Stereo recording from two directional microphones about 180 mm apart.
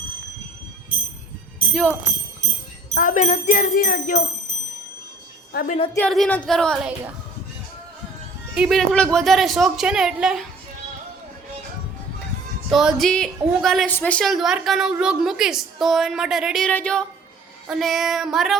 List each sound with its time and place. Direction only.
1.7 s a woman's voice: 5° left (ahead or behind)
2.9 s speech: 45° left (ahead or behind)
5.5 s speech: 45° left (ahead or behind)
6.1 s a woman's voice: 5° left (ahead or behind)
8.5 s a woman's voice: centre (ahead or behind)
12.7 s a woman's voice: centre (ahead or behind)